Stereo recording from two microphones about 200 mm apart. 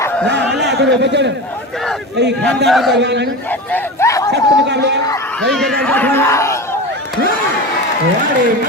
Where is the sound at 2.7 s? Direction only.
Centre (ahead or behind).